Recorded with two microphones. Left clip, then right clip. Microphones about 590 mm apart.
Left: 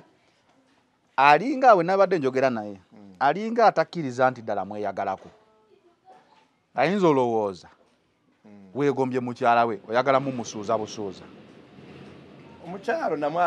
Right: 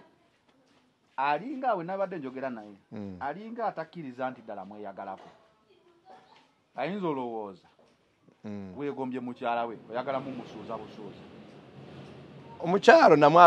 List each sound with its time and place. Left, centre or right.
1.1 s speech: left
6.7 s speech: left
8.7 s speech: left
10.7 s speech: left
12.6 s speech: right